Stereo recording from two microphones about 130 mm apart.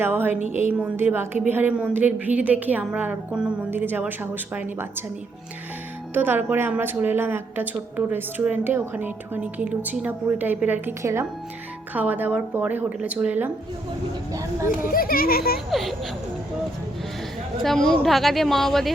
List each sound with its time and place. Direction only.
0.0 s a woman's voice: 15° right (ahead or behind)
0.3 s a woman's voice: 70° right (ahead or behind)
0.7 s a woman's voice: 10° right (ahead or behind)
6.1 s a woman's voice: 15° right (ahead or behind)
14.8 s a child's voice: 90° left
15.7 s speech: centre (ahead or behind)
17.6 s speech: 5° left (ahead or behind)